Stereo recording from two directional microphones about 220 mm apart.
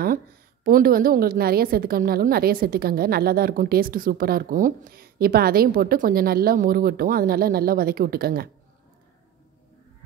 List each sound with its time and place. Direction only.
0.7 s a woman's voice: 40° right (ahead or behind)